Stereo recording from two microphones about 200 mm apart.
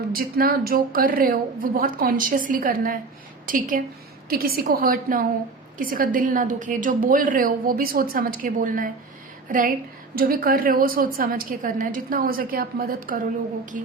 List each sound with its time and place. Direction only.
0.1 s a woman's voice: 50° right (ahead or behind)